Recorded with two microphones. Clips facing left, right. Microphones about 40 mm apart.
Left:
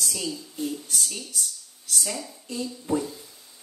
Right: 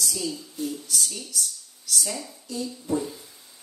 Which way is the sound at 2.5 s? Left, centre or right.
Left.